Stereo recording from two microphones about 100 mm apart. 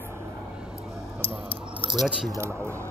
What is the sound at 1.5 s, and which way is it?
Keys jangling, 60° right (ahead or behind).